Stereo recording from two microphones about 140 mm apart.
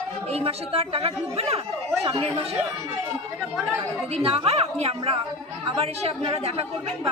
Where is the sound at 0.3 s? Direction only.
45° right (ahead or behind).